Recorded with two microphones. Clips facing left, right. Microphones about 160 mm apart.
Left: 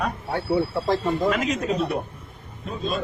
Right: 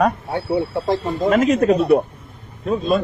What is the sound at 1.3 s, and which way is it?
Speech, 50° right (ahead or behind).